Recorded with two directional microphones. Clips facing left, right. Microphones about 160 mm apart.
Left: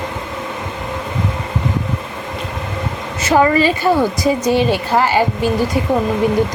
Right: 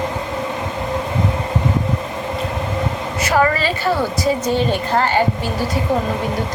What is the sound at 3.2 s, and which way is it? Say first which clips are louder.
A woman's voice: left 4 dB; 20° left (ahead or behind).